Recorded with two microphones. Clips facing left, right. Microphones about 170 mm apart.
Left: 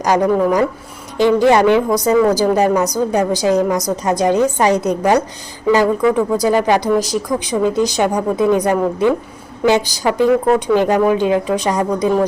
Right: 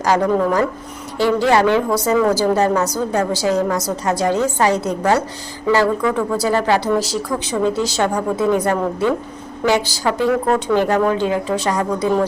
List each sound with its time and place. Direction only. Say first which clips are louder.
0.0 s speech: left 2 dB; 15° left (ahead or behind)